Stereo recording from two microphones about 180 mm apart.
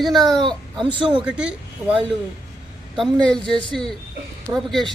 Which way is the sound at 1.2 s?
5° right (ahead or behind).